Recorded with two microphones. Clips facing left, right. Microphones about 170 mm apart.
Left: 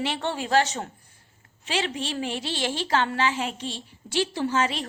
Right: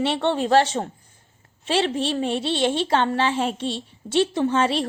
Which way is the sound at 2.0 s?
30° right (ahead or behind).